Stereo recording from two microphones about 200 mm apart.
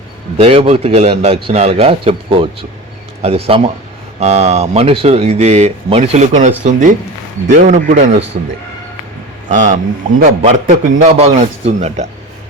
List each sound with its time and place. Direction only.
0.3 s a man's voice: 30° right (ahead or behind)
9.5 s a man's voice: 35° right (ahead or behind)